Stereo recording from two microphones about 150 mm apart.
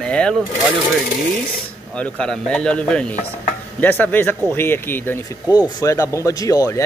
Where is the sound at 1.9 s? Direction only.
5° left (ahead or behind).